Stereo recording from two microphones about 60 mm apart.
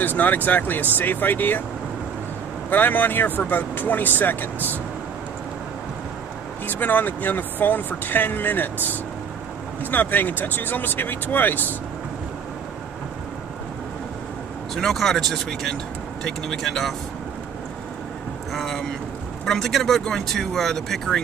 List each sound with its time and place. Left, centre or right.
0.0 s speech: left
2.7 s speech: left
6.7 s speech: left
9.8 s speech: left
14.8 s speech: centre
18.5 s speech: centre